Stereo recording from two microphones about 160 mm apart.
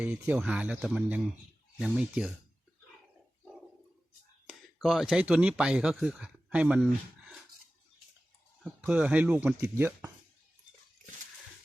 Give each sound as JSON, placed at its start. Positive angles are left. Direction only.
{"t": 0.0, "sound": "speech", "side_deg": -10}
{"t": 4.4, "sound": "speech", "side_deg": 0}
{"t": 8.6, "sound": "speech", "side_deg": -10}